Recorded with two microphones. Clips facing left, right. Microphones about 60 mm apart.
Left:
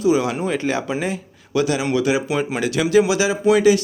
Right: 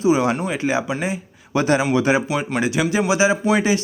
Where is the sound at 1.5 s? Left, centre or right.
Right.